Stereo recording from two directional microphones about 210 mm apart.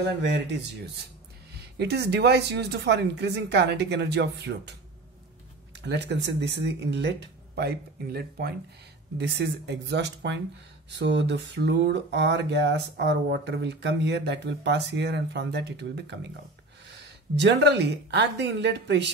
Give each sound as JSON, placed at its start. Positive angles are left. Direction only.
{"t": 1.8, "sound": "speech", "side_deg": -50}
{"t": 5.9, "sound": "speech", "side_deg": -55}